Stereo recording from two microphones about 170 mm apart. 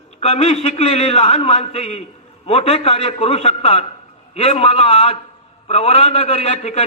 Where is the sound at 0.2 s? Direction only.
40° left (ahead or behind).